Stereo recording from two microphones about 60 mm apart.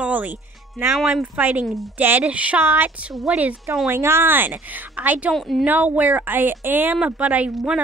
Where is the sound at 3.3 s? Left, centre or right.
Centre.